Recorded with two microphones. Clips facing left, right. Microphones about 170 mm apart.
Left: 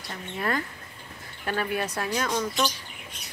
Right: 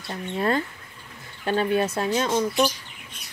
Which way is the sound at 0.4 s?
25° right (ahead or behind).